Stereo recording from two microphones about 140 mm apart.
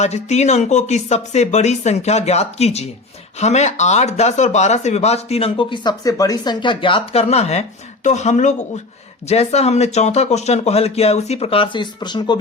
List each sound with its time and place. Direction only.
0.0 s speech: 55° left (ahead or behind); by 12.4 s 30° left (ahead or behind)